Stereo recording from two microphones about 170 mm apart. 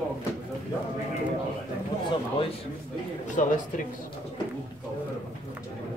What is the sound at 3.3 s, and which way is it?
Speech, 50° left (ahead or behind).